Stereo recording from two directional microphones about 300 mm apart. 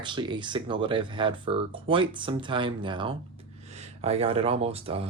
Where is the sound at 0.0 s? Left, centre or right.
Centre.